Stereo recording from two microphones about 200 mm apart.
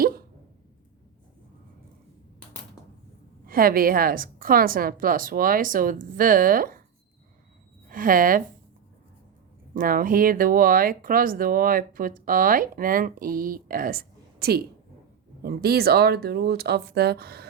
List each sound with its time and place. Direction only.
3.4 s speech: 45° right (ahead or behind)
7.9 s speech: 45° right (ahead or behind)
9.7 s speech: 45° right (ahead or behind)